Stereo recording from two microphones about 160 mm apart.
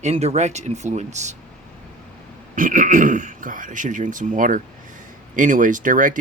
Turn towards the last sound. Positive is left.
turn(degrees=-55)  # may be behind; listen again after turning